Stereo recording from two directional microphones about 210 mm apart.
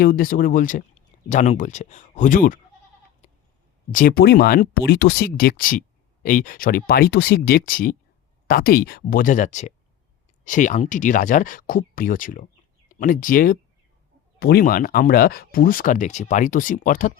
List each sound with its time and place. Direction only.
0.0 s speech: 45° left (ahead or behind)
3.2 s a sound: 35° left (ahead or behind)
3.9 s speech: 45° left (ahead or behind)